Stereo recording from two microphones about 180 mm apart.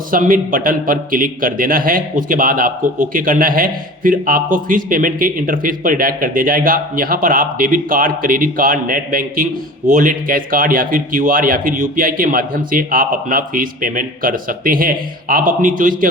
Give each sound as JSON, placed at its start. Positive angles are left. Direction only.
{"t": 0.1, "sound": "a man's voice", "side_deg": -50}